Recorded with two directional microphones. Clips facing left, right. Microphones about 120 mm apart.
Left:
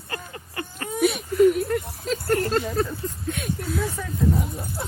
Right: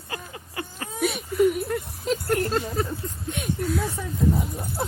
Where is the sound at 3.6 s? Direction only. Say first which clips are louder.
Right 2 dB; centre (ahead or behind).